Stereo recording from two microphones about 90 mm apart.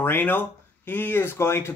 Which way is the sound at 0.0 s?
25° left (ahead or behind).